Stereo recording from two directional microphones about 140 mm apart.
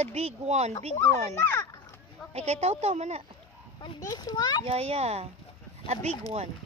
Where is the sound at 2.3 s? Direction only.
50° right (ahead or behind).